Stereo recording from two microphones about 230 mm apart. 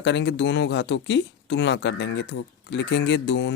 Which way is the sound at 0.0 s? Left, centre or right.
Left.